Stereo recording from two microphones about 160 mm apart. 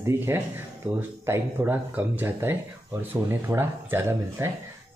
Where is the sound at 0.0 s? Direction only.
15° right (ahead or behind).